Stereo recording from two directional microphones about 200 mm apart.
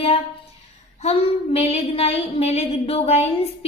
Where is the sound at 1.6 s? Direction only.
30° left (ahead or behind).